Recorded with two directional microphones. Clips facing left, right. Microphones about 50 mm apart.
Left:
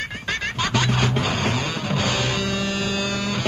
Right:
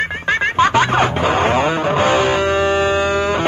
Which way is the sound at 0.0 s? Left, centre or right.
Right.